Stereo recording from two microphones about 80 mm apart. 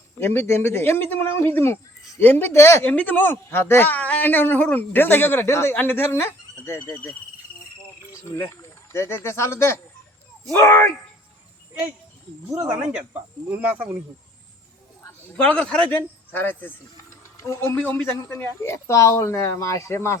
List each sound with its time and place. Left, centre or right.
0.2 s speech: left
2.9 s speech: left
8.2 s speech: left
12.6 s speech: centre
15.4 s speech: centre; by 20.1 s left